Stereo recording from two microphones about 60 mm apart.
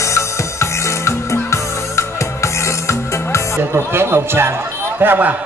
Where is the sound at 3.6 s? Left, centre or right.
Right.